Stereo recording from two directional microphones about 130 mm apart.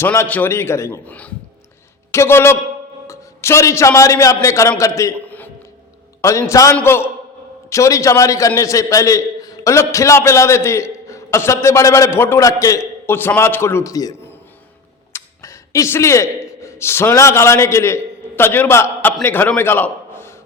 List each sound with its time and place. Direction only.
0.0 s a man's voice: 15° left (ahead or behind)
6.2 s a man's voice: 25° left (ahead or behind)